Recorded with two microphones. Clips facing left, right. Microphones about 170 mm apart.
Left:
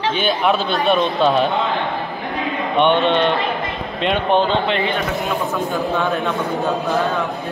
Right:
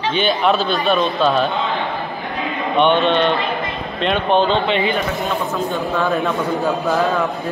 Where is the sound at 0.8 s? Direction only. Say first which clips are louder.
Left 3 dB; 20° left (ahead or behind).